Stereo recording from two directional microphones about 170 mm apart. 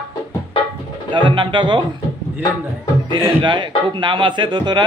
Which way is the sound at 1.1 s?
30° right (ahead or behind).